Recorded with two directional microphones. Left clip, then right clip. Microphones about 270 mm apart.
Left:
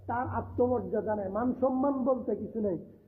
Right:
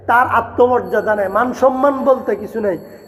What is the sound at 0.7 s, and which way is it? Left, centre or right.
A man's voice, centre.